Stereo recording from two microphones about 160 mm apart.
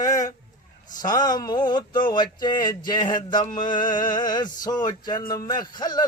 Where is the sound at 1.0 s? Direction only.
25° left (ahead or behind).